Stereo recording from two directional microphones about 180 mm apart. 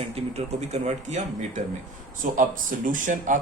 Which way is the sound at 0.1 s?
35° right (ahead or behind).